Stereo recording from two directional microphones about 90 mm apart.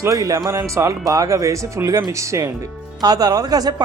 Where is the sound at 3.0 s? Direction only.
45° right (ahead or behind).